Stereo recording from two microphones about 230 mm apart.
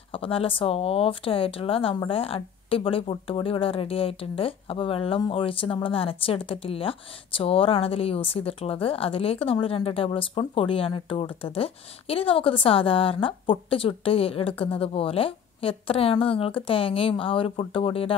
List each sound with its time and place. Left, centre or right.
0.1 s speech: left